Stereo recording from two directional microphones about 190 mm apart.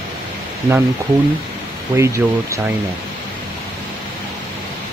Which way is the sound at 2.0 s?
15° right (ahead or behind).